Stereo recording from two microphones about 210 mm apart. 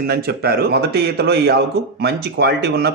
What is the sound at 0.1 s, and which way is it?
A man's voice, 45° right (ahead or behind).